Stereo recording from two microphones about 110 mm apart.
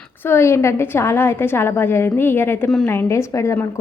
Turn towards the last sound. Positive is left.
turn(degrees=25)  # may be behind; listen again after turning